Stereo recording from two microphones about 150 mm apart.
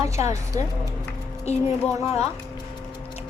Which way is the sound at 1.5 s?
45° left (ahead or behind).